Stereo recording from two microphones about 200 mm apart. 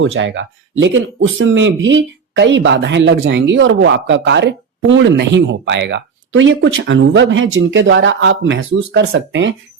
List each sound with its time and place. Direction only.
0.0 s speech: 70° right (ahead or behind)